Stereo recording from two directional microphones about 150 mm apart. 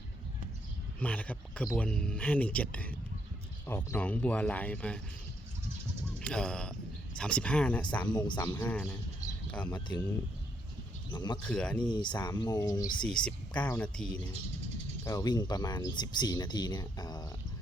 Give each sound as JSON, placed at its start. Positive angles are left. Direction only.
{"t": 0.9, "sound": "speech", "side_deg": 10}
{"t": 6.1, "sound": "speech", "side_deg": 5}
{"t": 8.1, "sound": "speech", "side_deg": 30}
{"t": 8.5, "sound": "speech", "side_deg": 10}
{"t": 11.1, "sound": "speech", "side_deg": 30}
{"t": 11.4, "sound": "speech", "side_deg": 5}
{"t": 11.9, "sound": "speech", "side_deg": 30}
{"t": 13.1, "sound": "speech", "side_deg": 5}
{"t": 15.0, "sound": "speech", "side_deg": 25}